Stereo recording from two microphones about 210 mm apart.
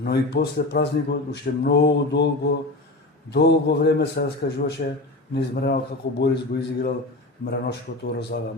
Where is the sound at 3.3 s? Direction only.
50° left (ahead or behind).